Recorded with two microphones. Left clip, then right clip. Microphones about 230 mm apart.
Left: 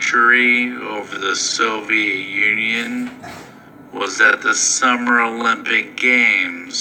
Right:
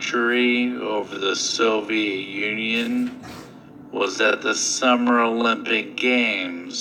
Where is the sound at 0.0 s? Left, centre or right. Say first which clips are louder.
Left 8 dB; centre.